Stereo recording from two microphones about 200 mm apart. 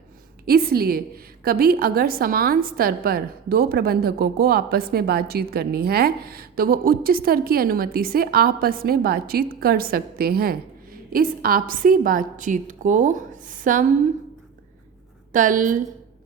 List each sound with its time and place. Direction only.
0.4 s a woman's voice: 50° right (ahead or behind)
15.3 s a woman's voice: 40° right (ahead or behind)